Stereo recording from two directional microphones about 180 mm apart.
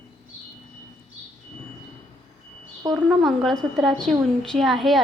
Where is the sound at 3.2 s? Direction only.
Centre (ahead or behind).